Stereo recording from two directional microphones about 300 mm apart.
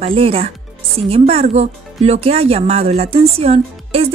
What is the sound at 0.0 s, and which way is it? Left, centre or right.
Speech, centre.